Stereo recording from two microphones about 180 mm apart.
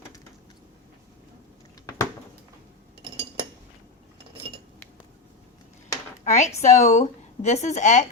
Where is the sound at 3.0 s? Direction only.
30° right (ahead or behind).